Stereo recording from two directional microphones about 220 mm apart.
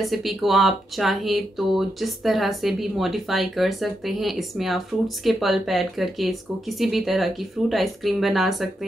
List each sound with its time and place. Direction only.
0.0 s speech: centre (ahead or behind)